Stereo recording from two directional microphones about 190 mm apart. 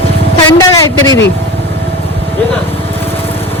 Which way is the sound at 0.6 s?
20° left (ahead or behind).